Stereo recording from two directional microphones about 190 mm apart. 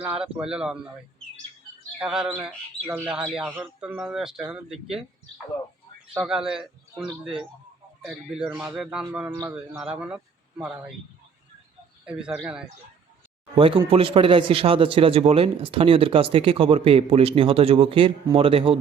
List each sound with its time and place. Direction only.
0.0 s a man's voice: 5° right (ahead or behind)
2.0 s a man's voice: 5° right (ahead or behind)
6.1 s a man's voice: 5° right (ahead or behind)
12.0 s a man's voice: 5° right (ahead or behind)
13.6 s a man's voice: 30° right (ahead or behind)